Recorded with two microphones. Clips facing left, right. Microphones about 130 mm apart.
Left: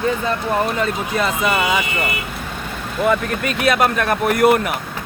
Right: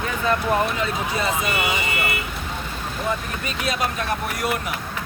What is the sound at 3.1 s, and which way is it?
Speech, 75° left (ahead or behind).